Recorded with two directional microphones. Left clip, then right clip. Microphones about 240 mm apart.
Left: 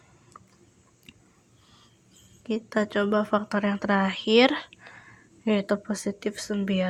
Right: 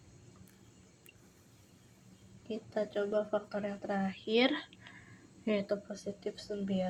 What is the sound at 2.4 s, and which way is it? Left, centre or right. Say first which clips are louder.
Speech: left 9 dB; left.